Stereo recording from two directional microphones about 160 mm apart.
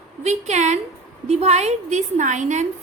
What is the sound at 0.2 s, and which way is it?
A woman's voice, 45° right (ahead or behind).